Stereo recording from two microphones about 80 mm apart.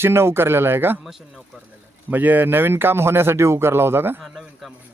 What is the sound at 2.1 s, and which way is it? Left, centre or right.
Speech, right.